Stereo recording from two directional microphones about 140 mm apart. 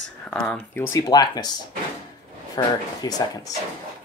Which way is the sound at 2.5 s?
25° left (ahead or behind).